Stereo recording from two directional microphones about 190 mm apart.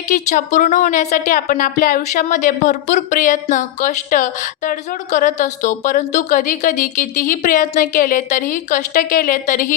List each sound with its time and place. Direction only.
0.1 s a woman's voice: 40° left (ahead or behind)